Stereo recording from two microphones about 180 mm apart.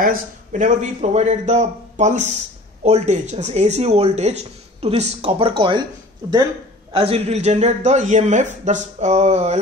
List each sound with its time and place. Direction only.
0.0 s a man's voice: 45° right (ahead or behind); by 5.9 s 25° right (ahead or behind)
6.9 s speech: 30° right (ahead or behind)